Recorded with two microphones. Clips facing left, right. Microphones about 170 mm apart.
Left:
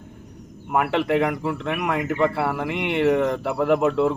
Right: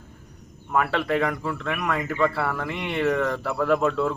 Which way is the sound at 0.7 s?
20° left (ahead or behind).